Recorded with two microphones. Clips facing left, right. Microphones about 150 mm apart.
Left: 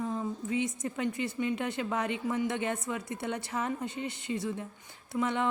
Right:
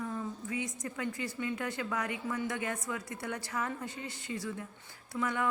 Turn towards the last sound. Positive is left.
turn(degrees=25)  # may be behind; listen again after turning